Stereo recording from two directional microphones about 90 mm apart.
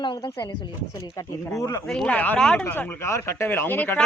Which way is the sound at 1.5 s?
35° left (ahead or behind).